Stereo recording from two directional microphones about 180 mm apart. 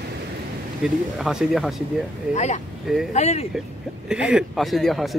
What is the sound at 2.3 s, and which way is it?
Speech, 40° left (ahead or behind).